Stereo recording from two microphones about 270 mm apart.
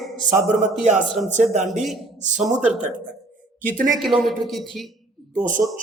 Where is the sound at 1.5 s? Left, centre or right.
Right.